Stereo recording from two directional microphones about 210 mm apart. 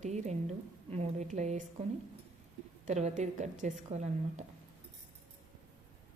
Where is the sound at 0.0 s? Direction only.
35° right (ahead or behind).